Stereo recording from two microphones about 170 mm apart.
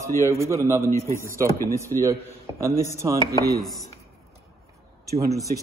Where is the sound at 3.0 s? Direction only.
20° right (ahead or behind).